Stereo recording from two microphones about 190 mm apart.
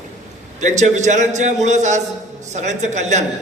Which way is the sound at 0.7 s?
40° right (ahead or behind).